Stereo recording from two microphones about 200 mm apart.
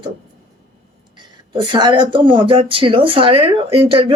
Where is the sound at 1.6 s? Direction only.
25° right (ahead or behind).